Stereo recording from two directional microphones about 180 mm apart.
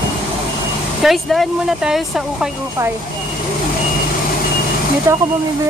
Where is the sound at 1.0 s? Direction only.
Centre (ahead or behind).